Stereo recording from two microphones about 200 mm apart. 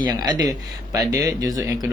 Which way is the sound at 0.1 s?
20° right (ahead or behind).